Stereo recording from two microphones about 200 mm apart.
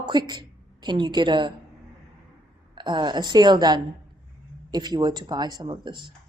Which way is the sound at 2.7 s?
20° right (ahead or behind).